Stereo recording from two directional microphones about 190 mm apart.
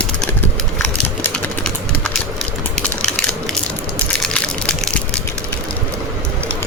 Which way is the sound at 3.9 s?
5° left (ahead or behind).